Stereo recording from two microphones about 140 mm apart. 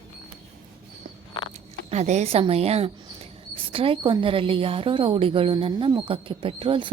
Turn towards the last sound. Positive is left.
turn(degrees=-40)  # may be behind; listen again after turning